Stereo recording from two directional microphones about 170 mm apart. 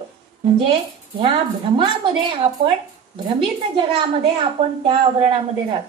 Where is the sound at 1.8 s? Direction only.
30° right (ahead or behind).